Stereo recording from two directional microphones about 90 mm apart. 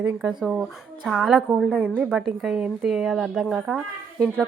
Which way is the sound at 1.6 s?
20° right (ahead or behind).